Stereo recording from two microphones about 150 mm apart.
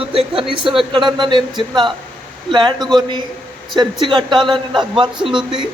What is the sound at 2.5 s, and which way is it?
Speech, 30° right (ahead or behind).